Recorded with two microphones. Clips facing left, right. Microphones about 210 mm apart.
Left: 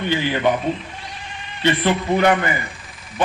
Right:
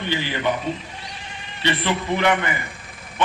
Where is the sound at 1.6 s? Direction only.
45° left (ahead or behind).